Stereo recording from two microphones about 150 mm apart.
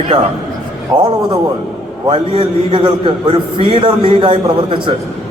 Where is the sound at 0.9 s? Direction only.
25° right (ahead or behind).